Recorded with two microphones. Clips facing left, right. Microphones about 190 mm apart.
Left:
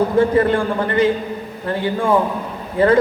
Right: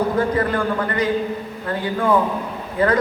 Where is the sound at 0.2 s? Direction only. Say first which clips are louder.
Left 5 dB; 25° left (ahead or behind).